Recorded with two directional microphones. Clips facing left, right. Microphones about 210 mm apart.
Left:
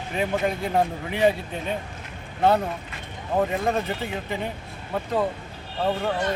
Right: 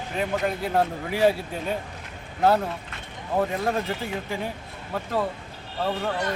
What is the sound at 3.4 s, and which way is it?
Speech, 5° right (ahead or behind).